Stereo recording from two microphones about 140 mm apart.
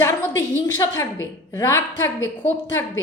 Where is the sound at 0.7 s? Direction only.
25° left (ahead or behind).